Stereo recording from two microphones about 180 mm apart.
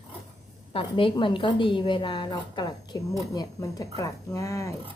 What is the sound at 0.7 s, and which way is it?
A woman's voice, 30° left (ahead or behind).